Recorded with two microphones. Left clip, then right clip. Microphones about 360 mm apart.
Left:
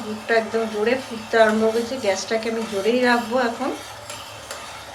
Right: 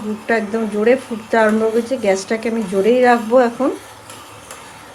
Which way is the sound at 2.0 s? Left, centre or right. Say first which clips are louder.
Right 4 dB; centre.